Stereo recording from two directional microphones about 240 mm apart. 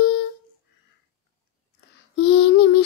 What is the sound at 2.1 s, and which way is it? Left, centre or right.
Child singing, left.